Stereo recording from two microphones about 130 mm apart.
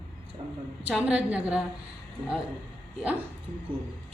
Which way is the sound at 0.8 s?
10° right (ahead or behind).